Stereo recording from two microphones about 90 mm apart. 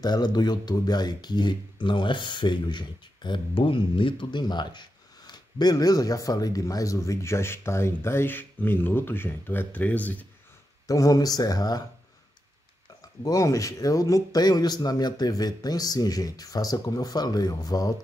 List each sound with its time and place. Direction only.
0.0 s speech: 50° left (ahead or behind); by 10.2 s 15° left (ahead or behind)
10.9 s speech: 40° left (ahead or behind)
13.2 s speech: 40° left (ahead or behind)